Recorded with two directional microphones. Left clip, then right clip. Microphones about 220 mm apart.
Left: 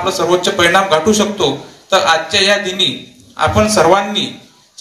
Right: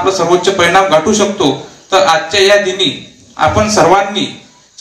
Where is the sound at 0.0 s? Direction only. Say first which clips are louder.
Right 3 dB; 45° left (ahead or behind).